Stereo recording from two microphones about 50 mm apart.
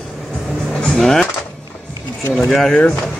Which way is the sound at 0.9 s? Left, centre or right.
Centre.